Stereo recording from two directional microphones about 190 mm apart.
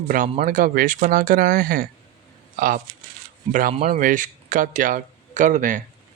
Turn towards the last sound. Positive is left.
turn(degrees=-45)  # may be behind; listen again after turning